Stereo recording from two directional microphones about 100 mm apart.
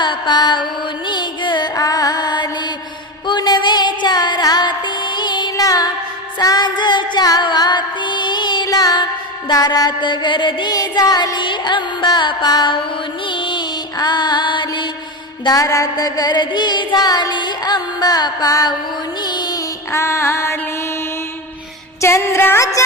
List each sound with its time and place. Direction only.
0.0 s carnatic music: 45° left (ahead or behind)
1.7 s music: 35° left (ahead or behind); by 14.8 s 50° left (ahead or behind)
15.4 s music: 35° left (ahead or behind)
19.9 s music: 30° left (ahead or behind)
22.0 s music: 25° left (ahead or behind)